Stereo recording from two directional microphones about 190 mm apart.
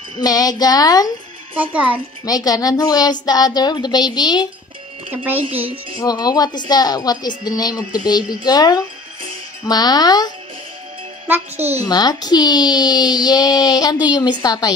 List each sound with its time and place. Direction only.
0.2 s a woman's voice: 20° left (ahead or behind)
1.6 s speech: 10° right (ahead or behind)
2.2 s a woman's voice: 20° left (ahead or behind)
5.1 s speech: 10° right (ahead or behind)
5.9 s a woman's voice: 20° left (ahead or behind)
11.2 s speech: 10° right (ahead or behind)
11.8 s a woman's voice: 20° left (ahead or behind)